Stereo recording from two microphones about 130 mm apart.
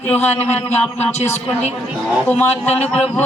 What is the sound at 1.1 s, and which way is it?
Speech, 60° left (ahead or behind).